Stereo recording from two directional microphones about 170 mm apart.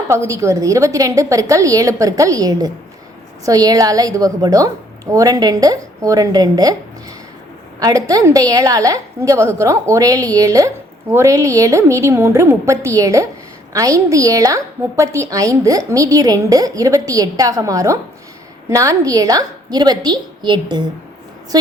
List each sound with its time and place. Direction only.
0.1 s a woman's voice: 20° right (ahead or behind)
7.8 s a woman's voice: 20° right (ahead or behind)